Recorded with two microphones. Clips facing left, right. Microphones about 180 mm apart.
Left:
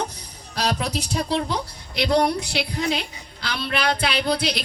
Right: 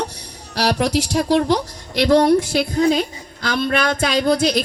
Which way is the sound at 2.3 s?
50° right (ahead or behind).